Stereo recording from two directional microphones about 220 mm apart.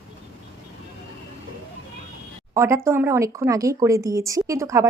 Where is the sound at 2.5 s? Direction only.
15° right (ahead or behind).